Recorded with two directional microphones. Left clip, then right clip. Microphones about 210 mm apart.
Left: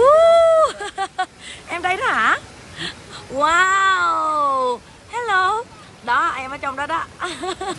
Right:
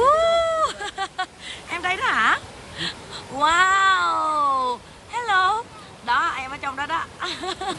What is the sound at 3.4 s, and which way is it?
Cat, 5° right (ahead or behind).